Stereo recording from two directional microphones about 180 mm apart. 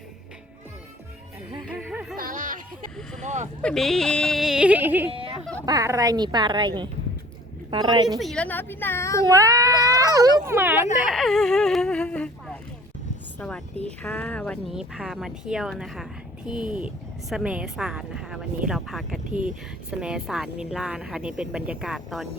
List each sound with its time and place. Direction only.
1.6 s music: 5° right (ahead or behind)
2.1 s a sound: 50° right (ahead or behind)
3.2 s speech: 40° right (ahead or behind)
3.6 s speech: 5° left (ahead or behind)
5.1 s a sound: 30° right (ahead or behind)
5.6 s a woman's voice: 20° right (ahead or behind)
8.2 s speech: 5° left (ahead or behind)
9.2 s a woman's voice: 20° right (ahead or behind)
11.0 s speech: centre (ahead or behind)
14.7 s a woman's voice: 5° right (ahead or behind)
19.3 s speech: 45° right (ahead or behind)
19.9 s speech: 5° right (ahead or behind)